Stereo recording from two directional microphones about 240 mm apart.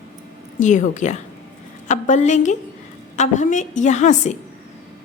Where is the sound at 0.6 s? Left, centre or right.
Left.